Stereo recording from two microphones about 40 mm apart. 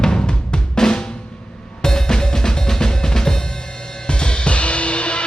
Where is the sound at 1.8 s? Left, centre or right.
Centre.